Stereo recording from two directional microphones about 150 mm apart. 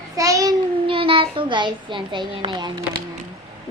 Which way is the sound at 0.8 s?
35° right (ahead or behind).